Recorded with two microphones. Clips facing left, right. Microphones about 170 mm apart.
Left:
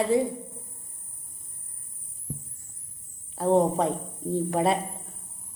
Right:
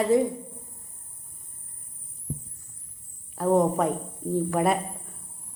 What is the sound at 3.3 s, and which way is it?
A woman's voice, 30° left (ahead or behind).